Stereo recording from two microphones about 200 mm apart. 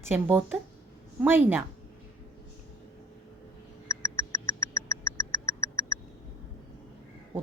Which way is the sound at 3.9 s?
15° left (ahead or behind).